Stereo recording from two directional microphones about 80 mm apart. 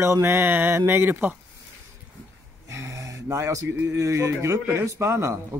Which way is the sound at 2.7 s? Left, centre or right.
Right.